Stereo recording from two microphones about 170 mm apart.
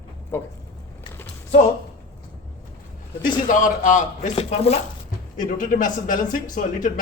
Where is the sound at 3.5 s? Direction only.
50° left (ahead or behind).